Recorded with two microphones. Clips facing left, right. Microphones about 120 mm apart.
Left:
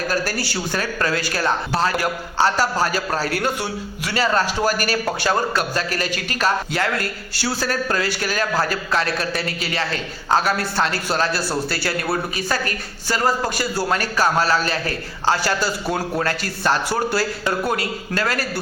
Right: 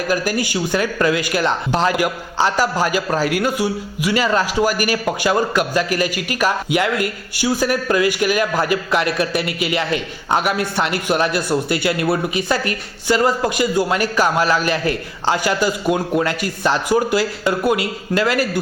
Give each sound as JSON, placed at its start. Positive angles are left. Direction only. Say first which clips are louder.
{"t": 0.1, "sound": "a man's voice", "louder": "right 4 dB", "side_deg": -15}